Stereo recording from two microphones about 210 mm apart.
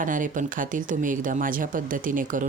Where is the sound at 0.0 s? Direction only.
40° right (ahead or behind).